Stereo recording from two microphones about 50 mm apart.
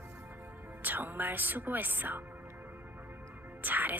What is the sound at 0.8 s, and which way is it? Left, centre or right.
A woman's voice, right.